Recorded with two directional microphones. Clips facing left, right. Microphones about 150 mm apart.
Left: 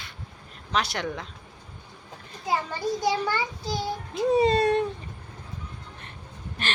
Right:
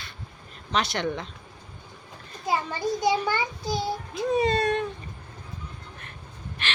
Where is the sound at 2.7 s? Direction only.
15° right (ahead or behind).